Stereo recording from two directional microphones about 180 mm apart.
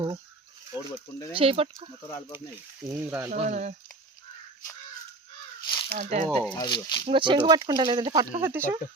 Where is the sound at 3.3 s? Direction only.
40° right (ahead or behind).